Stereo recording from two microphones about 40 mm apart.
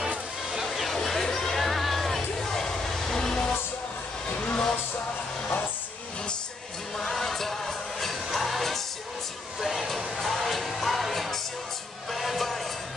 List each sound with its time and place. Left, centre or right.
0.7 s a sound: centre
0.9 s music: centre
4.3 s vehicle: left
7.0 s music: centre